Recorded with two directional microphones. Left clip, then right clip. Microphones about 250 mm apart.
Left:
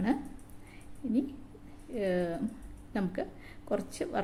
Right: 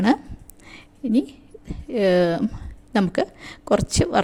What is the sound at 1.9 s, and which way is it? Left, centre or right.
A woman's voice, right.